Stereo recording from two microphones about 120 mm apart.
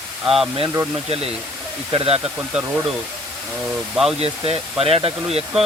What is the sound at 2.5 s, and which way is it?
Speech, 10° right (ahead or behind).